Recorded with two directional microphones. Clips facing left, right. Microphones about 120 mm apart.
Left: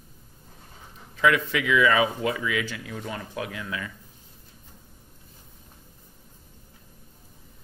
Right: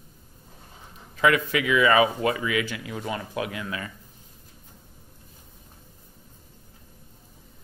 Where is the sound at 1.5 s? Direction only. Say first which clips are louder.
Right 1 dB; 55° right (ahead or behind).